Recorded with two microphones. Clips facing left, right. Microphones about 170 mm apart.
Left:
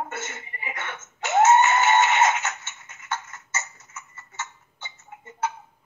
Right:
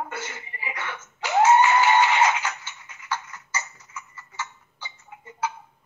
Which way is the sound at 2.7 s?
45° left (ahead or behind).